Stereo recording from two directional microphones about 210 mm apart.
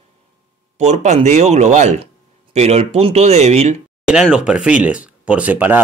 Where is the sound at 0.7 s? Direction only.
30° right (ahead or behind).